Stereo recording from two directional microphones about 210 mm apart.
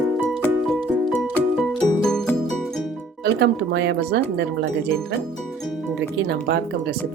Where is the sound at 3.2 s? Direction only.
55° right (ahead or behind).